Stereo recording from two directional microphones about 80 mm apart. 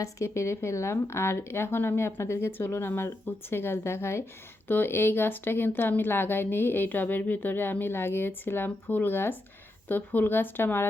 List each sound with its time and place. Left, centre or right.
0.0 s a woman's voice: left